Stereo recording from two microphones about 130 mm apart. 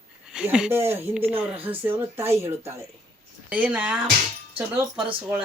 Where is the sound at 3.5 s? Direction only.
10° right (ahead or behind).